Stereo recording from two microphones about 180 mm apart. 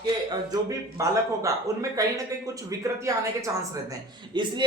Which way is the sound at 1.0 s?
20° right (ahead or behind).